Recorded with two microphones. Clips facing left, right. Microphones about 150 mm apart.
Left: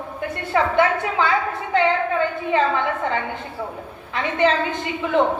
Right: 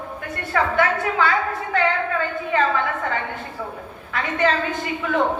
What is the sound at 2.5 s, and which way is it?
Speech, 20° left (ahead or behind).